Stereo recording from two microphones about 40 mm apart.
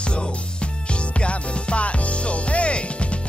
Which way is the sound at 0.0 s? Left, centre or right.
Left.